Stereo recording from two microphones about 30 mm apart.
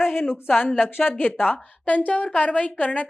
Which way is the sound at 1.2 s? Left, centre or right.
Left.